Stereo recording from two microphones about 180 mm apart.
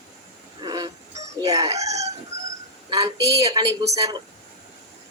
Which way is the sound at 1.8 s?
35° right (ahead or behind).